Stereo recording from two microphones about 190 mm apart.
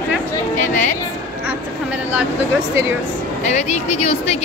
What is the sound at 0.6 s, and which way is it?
Speech, 40° left (ahead or behind).